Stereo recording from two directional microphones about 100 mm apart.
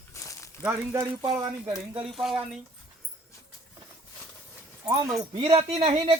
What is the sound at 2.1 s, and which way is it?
Speech, centre (ahead or behind).